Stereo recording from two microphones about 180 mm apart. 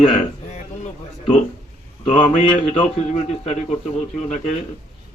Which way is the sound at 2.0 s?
40° left (ahead or behind).